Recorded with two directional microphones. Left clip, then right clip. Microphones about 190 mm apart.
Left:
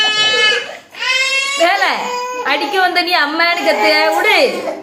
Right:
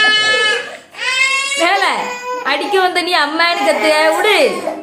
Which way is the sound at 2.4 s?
15° right (ahead or behind).